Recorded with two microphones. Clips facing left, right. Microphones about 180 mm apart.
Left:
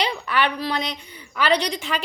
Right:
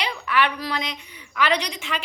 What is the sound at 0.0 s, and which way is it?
A woman's voice, 35° left (ahead or behind).